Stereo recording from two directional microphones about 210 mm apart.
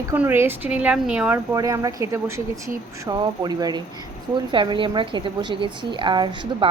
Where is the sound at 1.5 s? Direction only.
15° right (ahead or behind).